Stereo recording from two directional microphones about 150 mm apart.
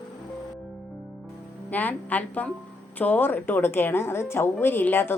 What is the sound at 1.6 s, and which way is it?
A woman's voice, 10° left (ahead or behind).